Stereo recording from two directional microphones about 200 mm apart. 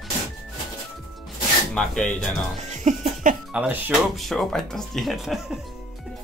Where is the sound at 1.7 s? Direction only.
5° left (ahead or behind).